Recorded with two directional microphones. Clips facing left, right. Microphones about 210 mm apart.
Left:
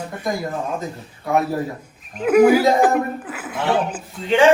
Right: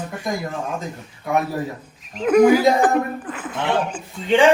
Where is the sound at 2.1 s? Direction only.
5° left (ahead or behind).